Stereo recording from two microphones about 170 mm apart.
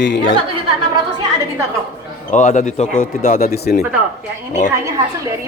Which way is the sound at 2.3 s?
45° left (ahead or behind).